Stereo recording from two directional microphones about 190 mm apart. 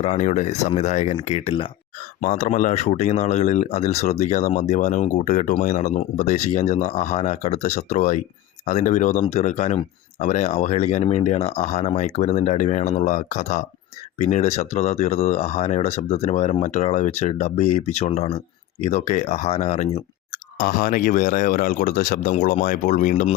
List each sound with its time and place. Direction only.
0.0 s speech: 35° left (ahead or behind)
2.2 s speech: 40° left (ahead or behind)
20.6 s speech: 45° left (ahead or behind)